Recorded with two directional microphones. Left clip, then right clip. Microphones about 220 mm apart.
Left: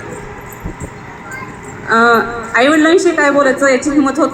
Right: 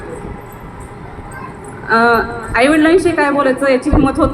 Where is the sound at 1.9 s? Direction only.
40° left (ahead or behind).